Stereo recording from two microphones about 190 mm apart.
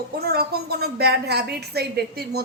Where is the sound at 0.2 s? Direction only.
55° right (ahead or behind).